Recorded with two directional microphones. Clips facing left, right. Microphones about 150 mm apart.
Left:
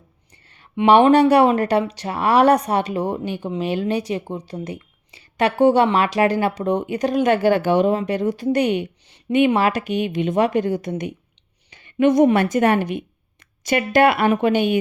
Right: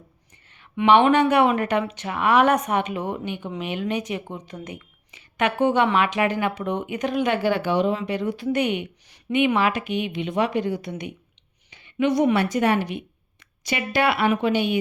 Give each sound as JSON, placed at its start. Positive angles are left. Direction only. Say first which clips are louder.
{"t": 0.9, "sound": "a woman's voice", "louder": "left 4 dB", "side_deg": 40}